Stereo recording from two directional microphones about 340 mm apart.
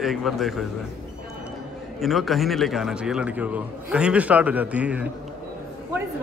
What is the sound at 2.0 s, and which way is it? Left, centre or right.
A man's voice, centre.